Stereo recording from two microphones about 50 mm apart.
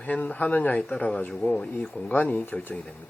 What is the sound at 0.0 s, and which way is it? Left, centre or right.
Speech, left.